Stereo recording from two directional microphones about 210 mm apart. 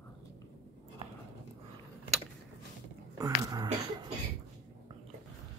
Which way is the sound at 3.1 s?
15° right (ahead or behind).